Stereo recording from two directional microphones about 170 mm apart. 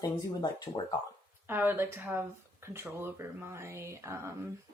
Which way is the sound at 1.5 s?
10° right (ahead or behind).